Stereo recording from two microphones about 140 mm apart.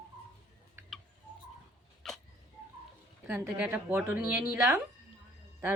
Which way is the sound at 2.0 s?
Centre (ahead or behind).